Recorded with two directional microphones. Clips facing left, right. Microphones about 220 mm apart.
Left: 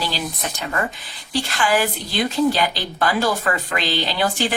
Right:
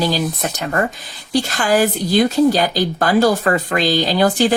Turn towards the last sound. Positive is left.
turn(degrees=-40)  # may be behind; listen again after turning